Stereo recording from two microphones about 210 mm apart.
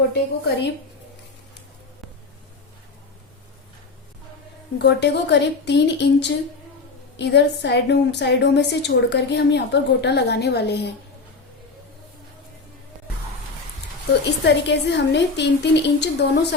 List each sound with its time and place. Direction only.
0.1 s a woman's voice: 55° left (ahead or behind)
4.8 s a woman's voice: 55° left (ahead or behind)
14.1 s a woman's voice: 55° left (ahead or behind)